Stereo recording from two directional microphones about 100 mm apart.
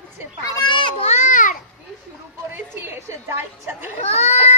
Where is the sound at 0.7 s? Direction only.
55° left (ahead or behind).